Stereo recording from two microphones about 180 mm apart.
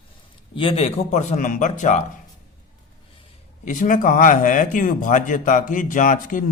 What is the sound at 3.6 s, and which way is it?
Speech, 45° left (ahead or behind).